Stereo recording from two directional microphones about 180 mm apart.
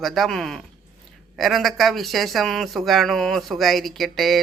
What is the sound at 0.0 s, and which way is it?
Speech, centre (ahead or behind).